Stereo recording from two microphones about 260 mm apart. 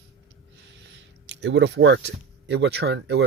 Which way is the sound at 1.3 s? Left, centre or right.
Right.